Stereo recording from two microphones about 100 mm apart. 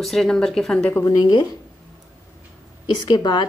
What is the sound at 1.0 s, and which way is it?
Speech, 45° left (ahead or behind).